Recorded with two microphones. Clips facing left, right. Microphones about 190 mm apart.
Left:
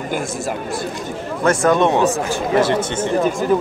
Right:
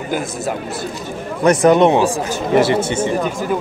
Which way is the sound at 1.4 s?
20° right (ahead or behind).